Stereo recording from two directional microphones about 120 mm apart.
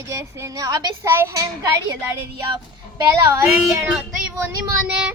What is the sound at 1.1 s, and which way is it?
Speech, 20° right (ahead or behind).